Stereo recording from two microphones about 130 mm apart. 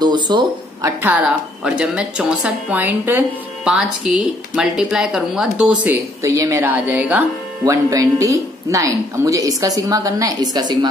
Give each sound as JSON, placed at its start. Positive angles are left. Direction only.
{"t": 0.0, "sound": "speech", "side_deg": -35}
{"t": 0.8, "sound": "a woman's voice", "side_deg": -15}
{"t": 3.7, "sound": "speech", "side_deg": -5}
{"t": 6.2, "sound": "a woman's voice", "side_deg": -25}
{"t": 7.6, "sound": "a woman's voice", "side_deg": -25}